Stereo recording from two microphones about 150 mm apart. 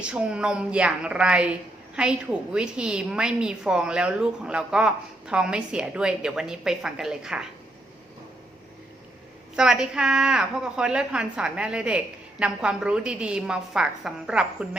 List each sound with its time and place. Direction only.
0.0 s a woman's voice: 5° right (ahead or behind)
9.6 s a woman's voice: 5° right (ahead or behind)